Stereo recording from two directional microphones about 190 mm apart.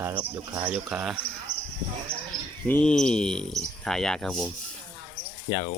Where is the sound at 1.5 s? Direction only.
55° left (ahead or behind).